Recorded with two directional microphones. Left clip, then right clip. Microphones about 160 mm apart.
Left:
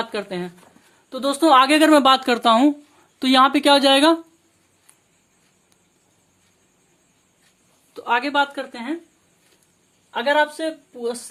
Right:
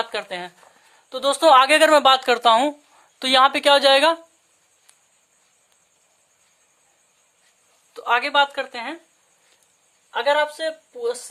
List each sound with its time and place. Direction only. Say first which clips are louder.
0.0 s speech: even; 30° right (ahead or behind)
7.9 s a woman's voice: right 1 dB; 25° right (ahead or behind); by 9.0 s 40° right (ahead or behind)
10.1 s a woman's voice: left 1 dB; 30° right (ahead or behind)